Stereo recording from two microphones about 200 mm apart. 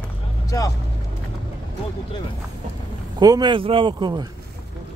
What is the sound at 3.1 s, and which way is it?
Speech, 20° right (ahead or behind).